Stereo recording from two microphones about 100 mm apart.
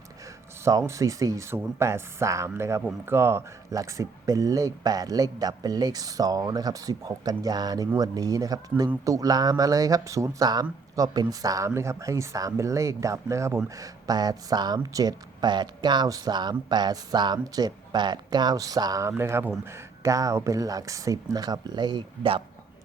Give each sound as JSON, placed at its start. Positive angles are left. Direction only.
{"t": 0.6, "sound": "speech", "side_deg": -30}